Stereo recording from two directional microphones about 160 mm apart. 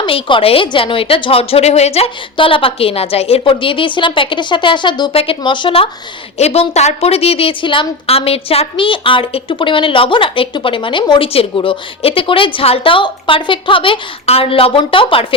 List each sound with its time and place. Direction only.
0.0 s a woman's voice: 30° left (ahead or behind)